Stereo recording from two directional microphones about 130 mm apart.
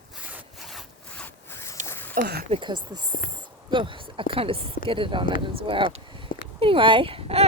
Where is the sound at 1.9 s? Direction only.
15° left (ahead or behind).